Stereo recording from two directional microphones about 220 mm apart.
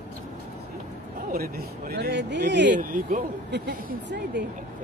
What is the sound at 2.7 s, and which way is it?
Speech, 35° right (ahead or behind).